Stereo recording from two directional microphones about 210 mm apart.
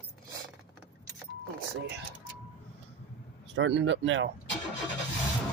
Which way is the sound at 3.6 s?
60° right (ahead or behind).